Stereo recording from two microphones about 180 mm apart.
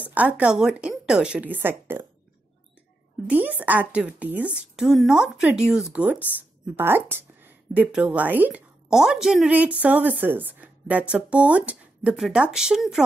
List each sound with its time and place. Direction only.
0.0 s a woman's voice: 10° right (ahead or behind)
3.3 s a woman's voice: 10° right (ahead or behind)